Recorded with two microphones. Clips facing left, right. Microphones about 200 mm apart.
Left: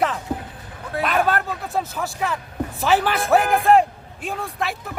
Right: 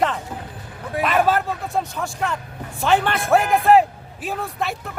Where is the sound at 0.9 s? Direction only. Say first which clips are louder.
Right 1 dB; 15° right (ahead or behind).